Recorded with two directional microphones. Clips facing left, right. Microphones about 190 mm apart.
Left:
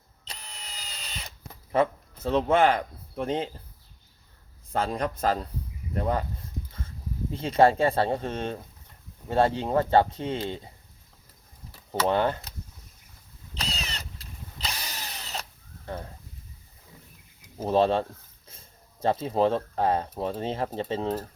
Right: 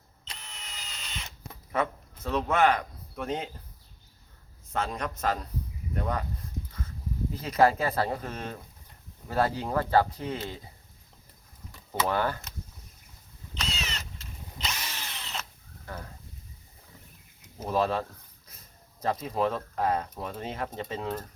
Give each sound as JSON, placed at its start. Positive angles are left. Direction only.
{"t": 0.3, "sound": "drill", "side_deg": 35}
{"t": 1.7, "sound": "speech", "side_deg": 30}
{"t": 4.7, "sound": "a man's voice", "side_deg": 35}
{"t": 7.3, "sound": "speech", "side_deg": 25}
{"t": 11.7, "sound": "speech", "side_deg": 25}
{"t": 13.5, "sound": "vehicle", "side_deg": 35}
{"t": 15.9, "sound": "a sound", "side_deg": 25}
{"t": 17.6, "sound": "a man's voice", "side_deg": 30}